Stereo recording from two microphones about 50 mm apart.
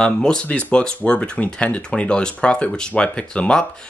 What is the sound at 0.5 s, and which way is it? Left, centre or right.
Speech, left.